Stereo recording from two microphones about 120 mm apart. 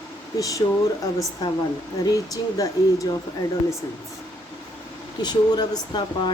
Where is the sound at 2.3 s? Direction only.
30° left (ahead or behind).